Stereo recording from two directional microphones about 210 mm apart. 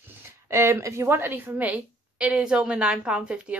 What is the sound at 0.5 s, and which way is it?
A woman's voice, 15° right (ahead or behind).